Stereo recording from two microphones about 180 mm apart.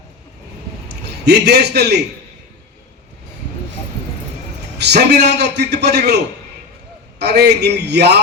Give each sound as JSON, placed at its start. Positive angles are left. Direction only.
{"t": 1.2, "sound": "a man's voice", "side_deg": -65}
{"t": 4.8, "sound": "a man's voice", "side_deg": -70}
{"t": 7.2, "sound": "a man's voice", "side_deg": -65}